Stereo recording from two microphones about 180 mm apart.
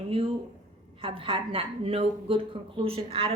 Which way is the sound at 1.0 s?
30° right (ahead or behind).